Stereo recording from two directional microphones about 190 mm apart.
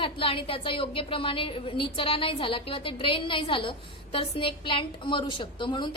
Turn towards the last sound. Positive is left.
turn(degrees=25)  # may be behind; listen again after turning